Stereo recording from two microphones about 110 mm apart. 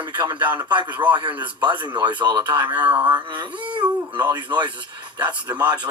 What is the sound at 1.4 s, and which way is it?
Speech, 45° right (ahead or behind).